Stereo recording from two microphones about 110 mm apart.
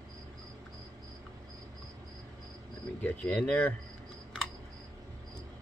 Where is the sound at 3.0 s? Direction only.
15° left (ahead or behind).